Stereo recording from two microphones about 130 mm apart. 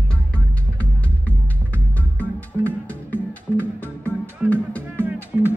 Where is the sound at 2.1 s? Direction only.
15° left (ahead or behind).